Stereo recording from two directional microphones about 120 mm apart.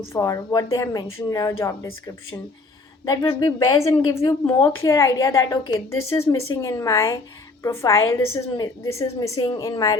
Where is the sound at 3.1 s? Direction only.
35° left (ahead or behind).